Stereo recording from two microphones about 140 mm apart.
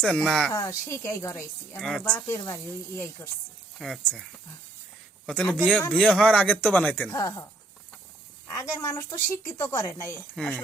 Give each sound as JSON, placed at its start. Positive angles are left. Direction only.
{"t": 0.0, "sound": "speech", "side_deg": 5}
{"t": 0.5, "sound": "a woman's voice", "side_deg": 25}
{"t": 1.8, "sound": "a woman's voice", "side_deg": 5}
{"t": 3.8, "sound": "speech", "side_deg": 0}
{"t": 7.1, "sound": "a woman's voice", "side_deg": 25}
{"t": 8.4, "sound": "a woman's voice", "side_deg": 20}
{"t": 10.3, "sound": "speech", "side_deg": 5}